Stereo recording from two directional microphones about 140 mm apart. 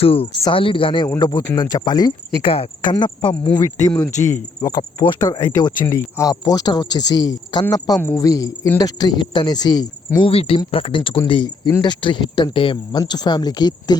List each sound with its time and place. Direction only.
0.0 s speech: 40° left (ahead or behind)
1.0 s speech: 30° left (ahead or behind)
2.5 s speech: 40° left (ahead or behind)